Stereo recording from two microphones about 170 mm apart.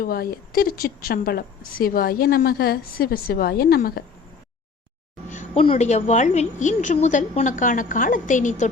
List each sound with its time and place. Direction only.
0.0 s a woman's voice: 60° left (ahead or behind)
5.3 s a sound: 45° left (ahead or behind)
5.6 s a woman's voice: 40° left (ahead or behind)